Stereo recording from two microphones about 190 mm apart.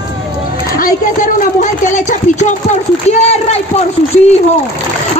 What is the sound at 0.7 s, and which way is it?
Speech, 45° left (ahead or behind).